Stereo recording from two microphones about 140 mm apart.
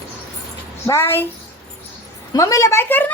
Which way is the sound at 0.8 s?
15° left (ahead or behind).